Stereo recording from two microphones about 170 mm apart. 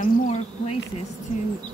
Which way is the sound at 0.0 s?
40° left (ahead or behind).